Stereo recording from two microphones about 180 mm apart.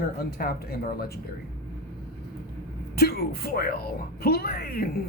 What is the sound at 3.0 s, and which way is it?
Speech, 60° left (ahead or behind).